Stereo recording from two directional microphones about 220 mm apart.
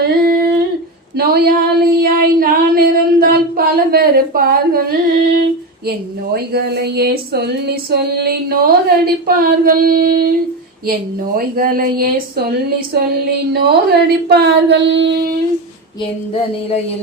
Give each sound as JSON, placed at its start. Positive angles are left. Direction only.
{"t": 0.0, "sound": "humming", "side_deg": -45}
{"t": 1.1, "sound": "female singing", "side_deg": -45}
{"t": 9.2, "sound": "speech", "side_deg": -40}
{"t": 11.3, "sound": "speech", "side_deg": -40}
{"t": 13.5, "sound": "female singing", "side_deg": -45}
{"t": 16.3, "sound": "a sound", "side_deg": 25}